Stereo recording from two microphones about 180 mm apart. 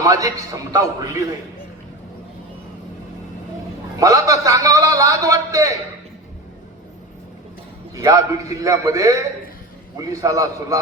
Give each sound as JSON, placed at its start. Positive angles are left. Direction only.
{"t": 0.0, "sound": "a man's voice", "side_deg": -20}
{"t": 4.0, "sound": "a man's voice", "side_deg": -20}
{"t": 7.9, "sound": "a man's voice", "side_deg": -20}